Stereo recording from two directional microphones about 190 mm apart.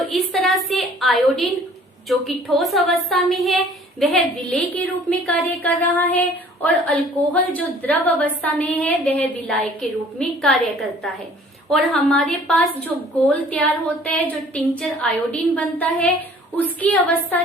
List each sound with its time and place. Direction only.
0.1 s a woman's voice: centre (ahead or behind)
11.7 s a woman's voice: centre (ahead or behind)